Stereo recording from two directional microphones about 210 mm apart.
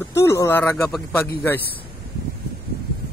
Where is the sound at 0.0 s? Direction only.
15° left (ahead or behind).